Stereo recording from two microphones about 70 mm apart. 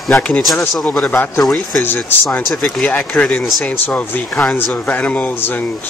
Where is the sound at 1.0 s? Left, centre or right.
Left.